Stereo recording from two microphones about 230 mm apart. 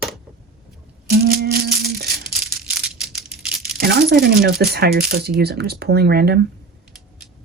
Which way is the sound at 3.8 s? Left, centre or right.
Right.